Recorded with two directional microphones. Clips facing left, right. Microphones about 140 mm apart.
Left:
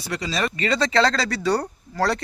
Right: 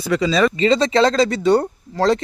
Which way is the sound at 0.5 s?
20° right (ahead or behind).